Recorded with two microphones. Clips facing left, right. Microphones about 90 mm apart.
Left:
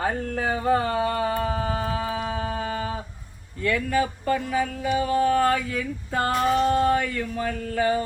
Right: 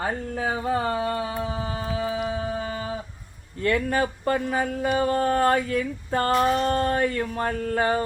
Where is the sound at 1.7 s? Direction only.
50° left (ahead or behind).